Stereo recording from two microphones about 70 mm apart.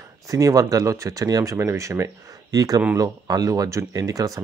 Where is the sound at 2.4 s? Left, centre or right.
Right.